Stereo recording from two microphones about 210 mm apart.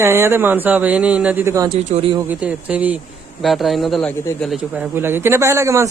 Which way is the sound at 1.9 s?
25° right (ahead or behind).